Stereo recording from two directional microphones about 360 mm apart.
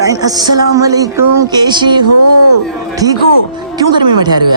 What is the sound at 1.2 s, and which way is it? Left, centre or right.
Speech, right.